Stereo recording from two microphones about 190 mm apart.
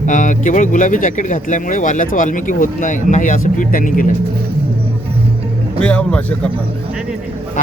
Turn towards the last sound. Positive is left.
turn(degrees=5)  # may be behind; listen again after turning